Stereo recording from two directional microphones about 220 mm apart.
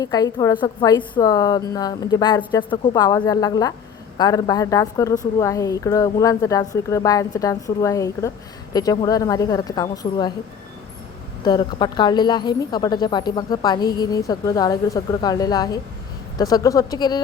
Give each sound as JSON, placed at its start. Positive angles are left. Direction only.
{"t": 0.0, "sound": "speech", "side_deg": 15}
{"t": 11.4, "sound": "speech", "side_deg": 20}